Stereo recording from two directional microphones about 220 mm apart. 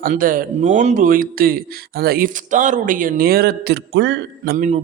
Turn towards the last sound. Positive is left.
turn(degrees=-45)  # may be behind; listen again after turning